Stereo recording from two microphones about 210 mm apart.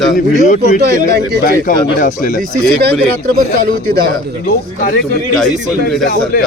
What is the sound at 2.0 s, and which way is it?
Speech, 40° left (ahead or behind).